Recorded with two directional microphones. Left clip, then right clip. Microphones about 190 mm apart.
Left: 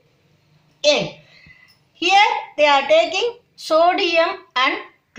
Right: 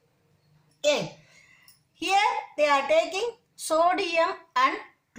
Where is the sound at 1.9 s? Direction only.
60° right (ahead or behind).